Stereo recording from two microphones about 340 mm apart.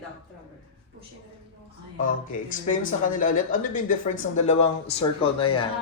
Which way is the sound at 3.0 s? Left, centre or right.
Left.